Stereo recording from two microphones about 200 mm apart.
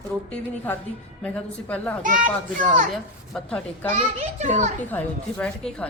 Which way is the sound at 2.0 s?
40° right (ahead or behind).